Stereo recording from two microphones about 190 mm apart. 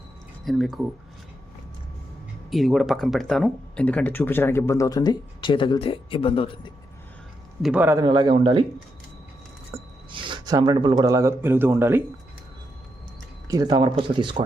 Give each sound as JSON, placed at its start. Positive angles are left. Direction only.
{"t": 0.4, "sound": "speech", "side_deg": 0}
{"t": 2.5, "sound": "speech", "side_deg": 0}
{"t": 7.6, "sound": "a man's voice", "side_deg": -5}
{"t": 8.0, "sound": "a man's voice", "side_deg": -25}
{"t": 9.7, "sound": "a sound", "side_deg": -15}
{"t": 10.1, "sound": "speech", "side_deg": -20}
{"t": 13.5, "sound": "a man's voice", "side_deg": -20}